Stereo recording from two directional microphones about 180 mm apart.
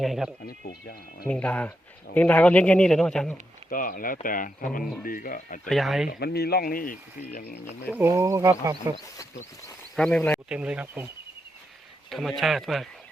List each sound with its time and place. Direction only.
0.0 s speech: centre (ahead or behind)
0.4 s speech: 60° left (ahead or behind)
1.3 s speech: 10° left (ahead or behind)
3.7 s speech: 50° left (ahead or behind)
5.6 s speech: centre (ahead or behind)
6.1 s speech: 60° left (ahead or behind)
7.9 s speech: 15° right (ahead or behind)
9.9 s speech: 5° left (ahead or behind)
10.5 s speech: 5° right (ahead or behind)
12.1 s speech: centre (ahead or behind)